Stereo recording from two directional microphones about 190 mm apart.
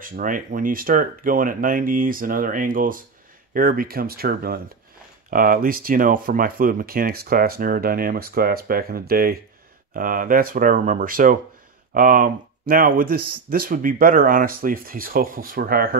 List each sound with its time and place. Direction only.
0.0 s speech: 45° right (ahead or behind)